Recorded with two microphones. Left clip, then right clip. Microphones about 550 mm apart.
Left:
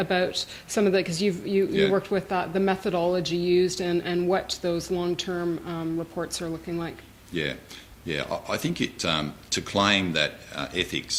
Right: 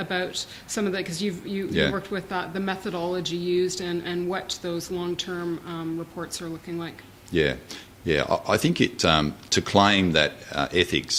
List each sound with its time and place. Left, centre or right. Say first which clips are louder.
0.0 s speech: left 3 dB; left
7.3 s speech: right 6 dB; right